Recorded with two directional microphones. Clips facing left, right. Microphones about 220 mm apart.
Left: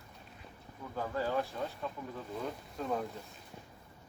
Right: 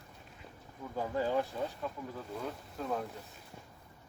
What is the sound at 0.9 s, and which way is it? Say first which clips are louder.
Speech: right 2 dB; 15° right (ahead or behind).